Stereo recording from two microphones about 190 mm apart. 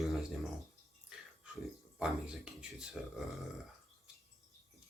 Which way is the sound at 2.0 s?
5° right (ahead or behind).